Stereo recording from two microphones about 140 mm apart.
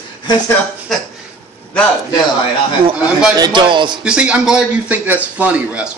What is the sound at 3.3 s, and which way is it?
Speech, 30° right (ahead or behind).